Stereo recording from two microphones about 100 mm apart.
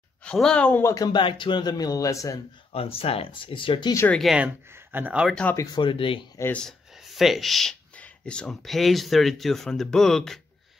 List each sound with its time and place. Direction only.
0.2 s speech: 10° left (ahead or behind)
0.8 s speech: 35° left (ahead or behind)
1.1 s speech: 55° left (ahead or behind); by 2.3 s 35° left (ahead or behind)
2.7 s speech: 70° left (ahead or behind)
4.2 s speech: centre (ahead or behind)
4.7 s speech: 20° right (ahead or behind)
5.4 s speech: 10° left (ahead or behind)
5.8 s speech: 60° left (ahead or behind)
7.1 s speech: centre (ahead or behind)